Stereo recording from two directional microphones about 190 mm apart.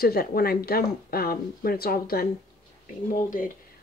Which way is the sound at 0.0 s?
50° left (ahead or behind).